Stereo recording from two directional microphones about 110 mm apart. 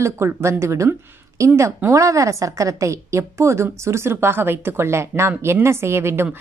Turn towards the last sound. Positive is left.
turn(degrees=-20)  # may be behind; listen again after turning